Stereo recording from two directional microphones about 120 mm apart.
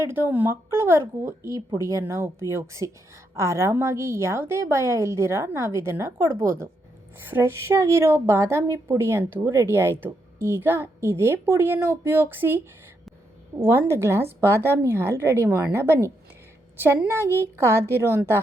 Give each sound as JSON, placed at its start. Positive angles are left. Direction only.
{"t": 0.0, "sound": "a woman's voice", "side_deg": -20}
{"t": 13.7, "sound": "a woman's voice", "side_deg": -20}